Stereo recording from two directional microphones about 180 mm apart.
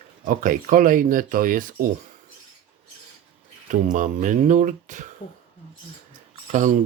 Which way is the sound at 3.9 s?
45° right (ahead or behind).